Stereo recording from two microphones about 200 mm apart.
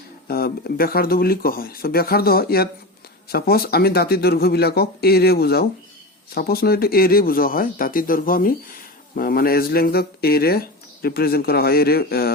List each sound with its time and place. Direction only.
0.3 s speech: 50° left (ahead or behind)